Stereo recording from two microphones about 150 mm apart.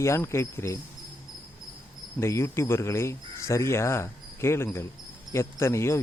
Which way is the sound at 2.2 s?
20° left (ahead or behind).